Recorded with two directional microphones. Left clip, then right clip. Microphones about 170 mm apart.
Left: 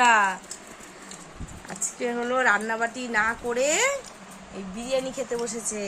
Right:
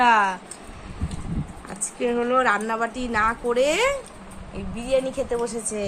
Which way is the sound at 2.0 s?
Centre (ahead or behind).